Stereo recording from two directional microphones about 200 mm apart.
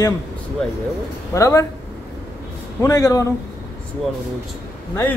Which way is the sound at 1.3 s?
15° left (ahead or behind).